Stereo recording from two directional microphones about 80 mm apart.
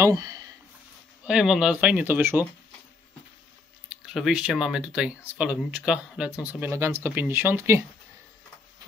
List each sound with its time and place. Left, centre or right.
0.0 s speech: right
1.2 s speech: centre
2.1 s speech: right
3.9 s speech: centre
6.7 s speech: right